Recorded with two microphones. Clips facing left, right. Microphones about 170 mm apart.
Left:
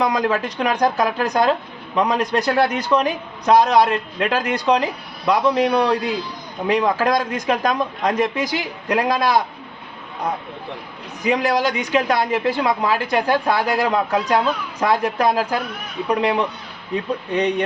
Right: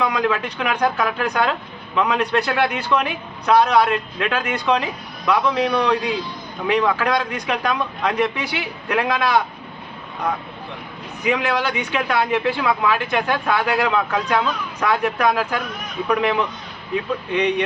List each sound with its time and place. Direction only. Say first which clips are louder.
0.0 s speech: left 1 dB; 40° left (ahead or behind)
11.2 s speech: left 2 dB; 35° left (ahead or behind)